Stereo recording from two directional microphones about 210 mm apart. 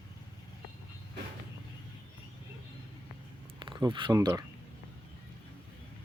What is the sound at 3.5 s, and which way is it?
Speech, 20° right (ahead or behind).